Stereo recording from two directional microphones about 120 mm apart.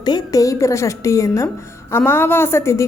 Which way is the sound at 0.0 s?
30° left (ahead or behind).